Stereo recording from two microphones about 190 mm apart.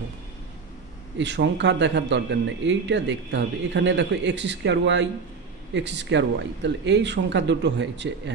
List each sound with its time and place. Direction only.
1.1 s a man's voice: 70° right (ahead or behind)